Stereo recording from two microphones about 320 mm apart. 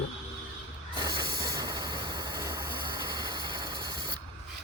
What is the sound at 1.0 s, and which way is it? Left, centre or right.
Train, centre.